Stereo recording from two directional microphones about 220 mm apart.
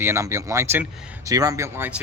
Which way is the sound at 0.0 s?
10° right (ahead or behind).